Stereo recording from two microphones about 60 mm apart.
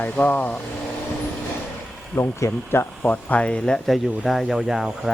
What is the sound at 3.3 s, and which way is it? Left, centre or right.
Speech, centre.